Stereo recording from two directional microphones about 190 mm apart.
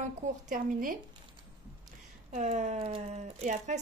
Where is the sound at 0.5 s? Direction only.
45° right (ahead or behind).